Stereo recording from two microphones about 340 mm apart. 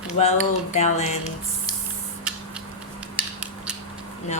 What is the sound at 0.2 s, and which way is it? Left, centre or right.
Speech, centre.